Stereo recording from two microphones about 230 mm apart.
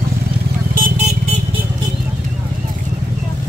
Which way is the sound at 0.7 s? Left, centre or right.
Right.